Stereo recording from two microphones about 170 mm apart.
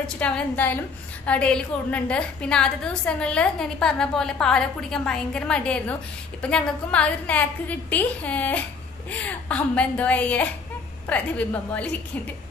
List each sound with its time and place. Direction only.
0.0 s a woman's voice: 5° left (ahead or behind)